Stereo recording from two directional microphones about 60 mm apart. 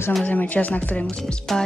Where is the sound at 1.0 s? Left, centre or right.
Centre.